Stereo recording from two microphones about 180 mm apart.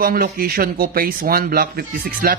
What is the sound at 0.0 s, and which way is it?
Speech, 55° right (ahead or behind).